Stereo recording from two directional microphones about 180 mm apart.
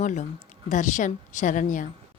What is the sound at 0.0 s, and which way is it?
A woman's voice, 45° left (ahead or behind).